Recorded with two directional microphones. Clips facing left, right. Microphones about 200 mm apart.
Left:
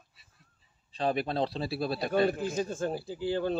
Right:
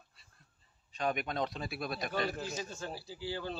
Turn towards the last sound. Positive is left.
turn(degrees=50)  # may be behind; listen again after turning